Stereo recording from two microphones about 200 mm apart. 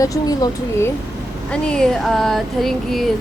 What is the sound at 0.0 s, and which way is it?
Speech, 15° left (ahead or behind).